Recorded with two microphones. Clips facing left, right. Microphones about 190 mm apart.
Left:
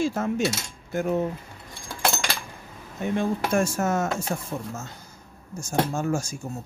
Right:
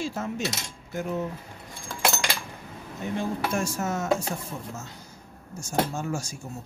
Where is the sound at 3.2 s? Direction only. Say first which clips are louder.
Left 4 dB; 50° left (ahead or behind).